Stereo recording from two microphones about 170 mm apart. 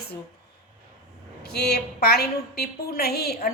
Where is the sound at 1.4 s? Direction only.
70° left (ahead or behind).